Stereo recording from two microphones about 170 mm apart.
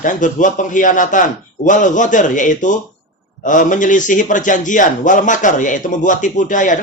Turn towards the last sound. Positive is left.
turn(degrees=50)  # may be behind; listen again after turning